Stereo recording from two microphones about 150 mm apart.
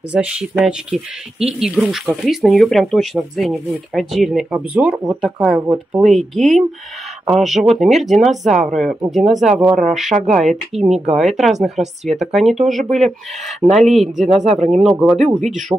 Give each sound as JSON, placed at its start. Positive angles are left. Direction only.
{"t": 0.1, "sound": "speech", "side_deg": -5}
{"t": 14.5, "sound": "speech", "side_deg": -50}
{"t": 14.8, "sound": "speech", "side_deg": -5}